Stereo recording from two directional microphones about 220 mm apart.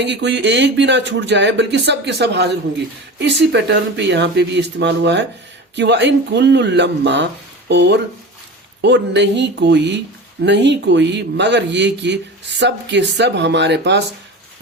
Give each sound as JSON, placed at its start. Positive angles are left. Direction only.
{"t": 0.0, "sound": "speech", "side_deg": -50}